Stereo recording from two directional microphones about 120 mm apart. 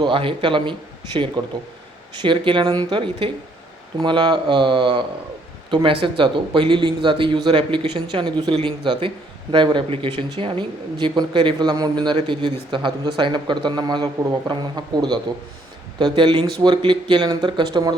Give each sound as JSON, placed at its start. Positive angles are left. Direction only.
{"t": 0.0, "sound": "speech", "side_deg": -45}